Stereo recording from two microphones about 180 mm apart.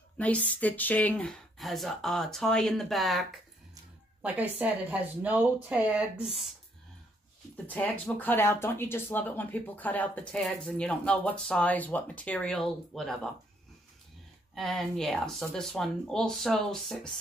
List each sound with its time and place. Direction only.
0.2 s a woman's voice: 5° left (ahead or behind)
7.5 s speech: 10° left (ahead or behind)
14.5 s speech: centre (ahead or behind)